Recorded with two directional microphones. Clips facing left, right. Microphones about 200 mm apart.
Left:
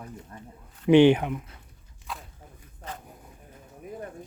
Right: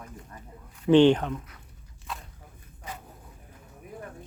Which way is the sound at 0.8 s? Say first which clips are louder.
Left 1 dB; 10° left (ahead or behind).